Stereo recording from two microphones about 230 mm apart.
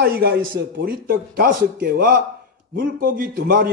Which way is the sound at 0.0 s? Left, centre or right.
Right.